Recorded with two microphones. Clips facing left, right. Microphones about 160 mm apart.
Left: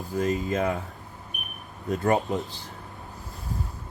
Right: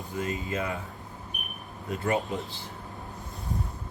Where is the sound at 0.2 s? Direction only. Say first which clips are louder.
Left 6 dB; 40° left (ahead or behind).